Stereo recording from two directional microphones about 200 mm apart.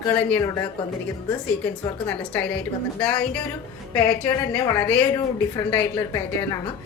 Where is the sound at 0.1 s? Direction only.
5° left (ahead or behind).